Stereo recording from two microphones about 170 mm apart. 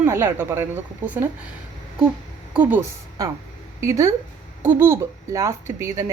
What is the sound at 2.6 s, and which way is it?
Speech, 10° right (ahead or behind).